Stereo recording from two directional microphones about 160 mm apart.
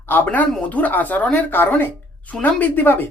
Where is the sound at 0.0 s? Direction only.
10° left (ahead or behind).